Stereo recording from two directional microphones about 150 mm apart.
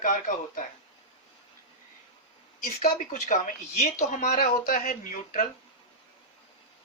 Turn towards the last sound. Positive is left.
turn(degrees=60)  # may be behind; listen again after turning